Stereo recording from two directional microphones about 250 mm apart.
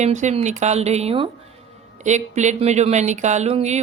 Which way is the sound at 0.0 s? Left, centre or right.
Right.